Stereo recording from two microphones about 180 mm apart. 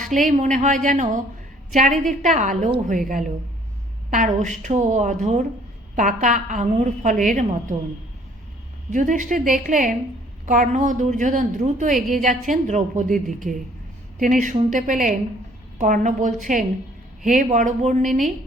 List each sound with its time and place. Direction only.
0.1 s a woman's voice: 45° right (ahead or behind)
8.9 s a woman's voice: 45° right (ahead or behind)